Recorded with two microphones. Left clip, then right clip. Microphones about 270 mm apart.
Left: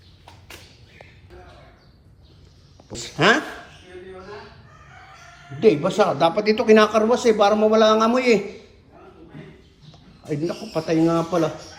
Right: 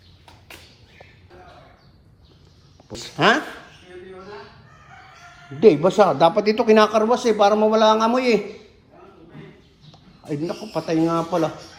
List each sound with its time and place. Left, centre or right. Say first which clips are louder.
2.9 s a man's voice: even; centre
5.5 s a man's voice: right 3 dB; right
10.2 s a man's voice: left 1 dB; centre